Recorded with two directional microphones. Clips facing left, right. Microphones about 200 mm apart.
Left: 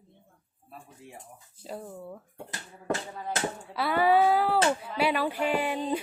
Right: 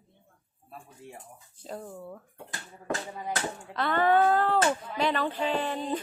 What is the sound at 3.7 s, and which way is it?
Speech, 5° left (ahead or behind).